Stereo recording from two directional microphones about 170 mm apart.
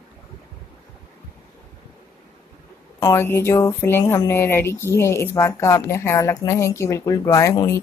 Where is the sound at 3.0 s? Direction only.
15° left (ahead or behind).